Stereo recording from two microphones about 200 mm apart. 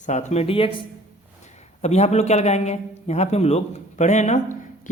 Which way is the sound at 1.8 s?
35° left (ahead or behind).